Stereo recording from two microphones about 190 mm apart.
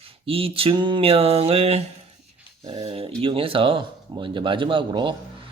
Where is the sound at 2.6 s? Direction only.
30° right (ahead or behind).